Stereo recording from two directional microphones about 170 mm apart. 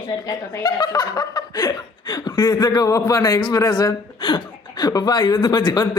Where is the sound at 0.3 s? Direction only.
25° left (ahead or behind).